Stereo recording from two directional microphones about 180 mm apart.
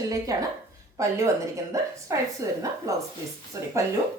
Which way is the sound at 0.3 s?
20° right (ahead or behind).